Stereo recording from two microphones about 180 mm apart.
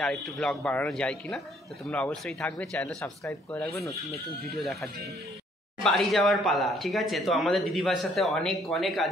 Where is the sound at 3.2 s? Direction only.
15° left (ahead or behind).